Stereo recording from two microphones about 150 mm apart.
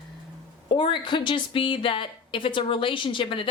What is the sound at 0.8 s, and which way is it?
Speech, 30° left (ahead or behind).